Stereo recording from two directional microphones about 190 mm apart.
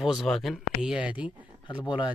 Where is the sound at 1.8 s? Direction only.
25° left (ahead or behind).